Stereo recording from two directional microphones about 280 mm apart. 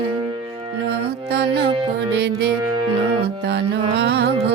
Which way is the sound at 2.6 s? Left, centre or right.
Centre.